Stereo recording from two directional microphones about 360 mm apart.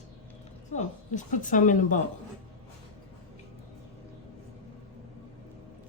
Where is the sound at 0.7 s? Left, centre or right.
Centre.